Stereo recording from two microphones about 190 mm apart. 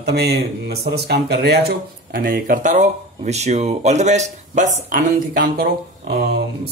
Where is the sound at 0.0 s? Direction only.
60° right (ahead or behind).